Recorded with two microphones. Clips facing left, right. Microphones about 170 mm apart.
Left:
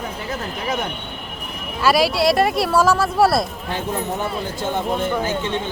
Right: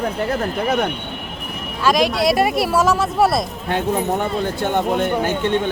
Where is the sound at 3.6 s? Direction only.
60° right (ahead or behind).